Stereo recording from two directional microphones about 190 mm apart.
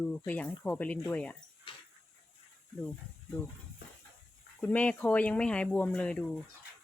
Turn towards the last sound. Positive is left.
turn(degrees=5)  # may be behind; listen again after turning